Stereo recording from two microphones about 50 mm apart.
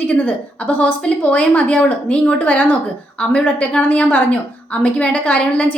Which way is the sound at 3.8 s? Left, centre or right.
Left.